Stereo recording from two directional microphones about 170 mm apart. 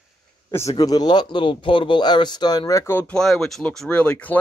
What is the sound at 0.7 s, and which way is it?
Speech, 20° left (ahead or behind).